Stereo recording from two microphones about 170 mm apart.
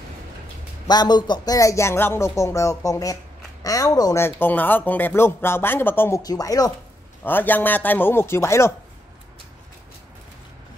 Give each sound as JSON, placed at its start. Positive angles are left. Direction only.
{"t": 0.8, "sound": "speech", "side_deg": 25}